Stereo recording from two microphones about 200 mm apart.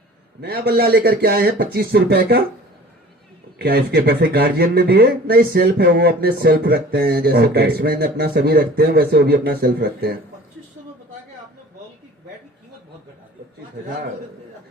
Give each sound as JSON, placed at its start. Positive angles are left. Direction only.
{"t": 0.4, "sound": "speech", "side_deg": -50}
{"t": 3.6, "sound": "speech", "side_deg": -55}